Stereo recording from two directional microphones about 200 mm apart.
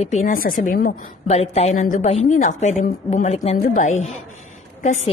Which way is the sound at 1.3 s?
30° left (ahead or behind).